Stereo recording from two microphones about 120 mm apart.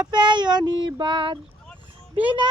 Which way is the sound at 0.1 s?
40° right (ahead or behind).